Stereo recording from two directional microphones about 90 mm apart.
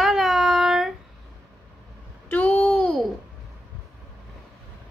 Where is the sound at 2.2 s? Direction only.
20° left (ahead or behind).